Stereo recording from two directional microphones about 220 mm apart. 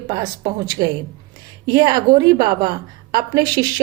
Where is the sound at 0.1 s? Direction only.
15° right (ahead or behind).